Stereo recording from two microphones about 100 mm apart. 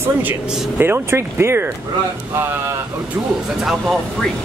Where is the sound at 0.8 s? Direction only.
25° right (ahead or behind).